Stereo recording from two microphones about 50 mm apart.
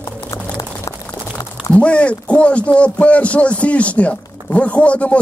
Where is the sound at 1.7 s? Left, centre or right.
Left.